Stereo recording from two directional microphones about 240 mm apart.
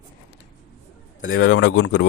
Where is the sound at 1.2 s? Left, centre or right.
Left.